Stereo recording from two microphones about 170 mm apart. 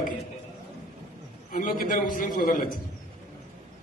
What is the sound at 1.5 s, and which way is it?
A man's voice, 55° left (ahead or behind).